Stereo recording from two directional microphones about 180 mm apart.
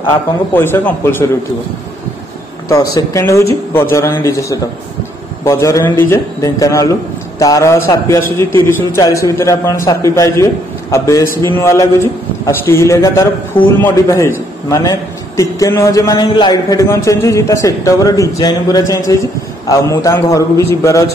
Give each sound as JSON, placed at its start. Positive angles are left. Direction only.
{"t": 0.1, "sound": "a man's voice", "side_deg": 10}
{"t": 2.7, "sound": "a man's voice", "side_deg": 20}